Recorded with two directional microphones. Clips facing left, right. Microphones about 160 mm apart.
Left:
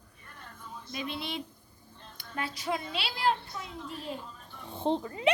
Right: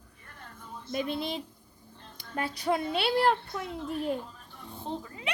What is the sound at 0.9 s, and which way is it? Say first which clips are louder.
Speech: right 5 dB; 45° right (ahead or behind).